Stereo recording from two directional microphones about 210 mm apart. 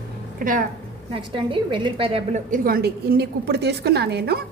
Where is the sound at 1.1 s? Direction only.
25° right (ahead or behind).